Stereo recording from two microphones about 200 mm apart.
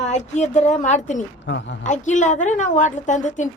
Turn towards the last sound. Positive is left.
turn(degrees=35)  # may be behind; listen again after turning